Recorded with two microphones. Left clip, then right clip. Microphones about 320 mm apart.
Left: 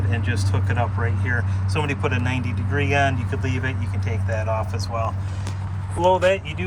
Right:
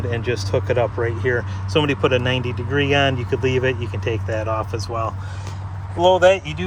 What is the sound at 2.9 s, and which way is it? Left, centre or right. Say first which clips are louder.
Speech: right 2 dB; right.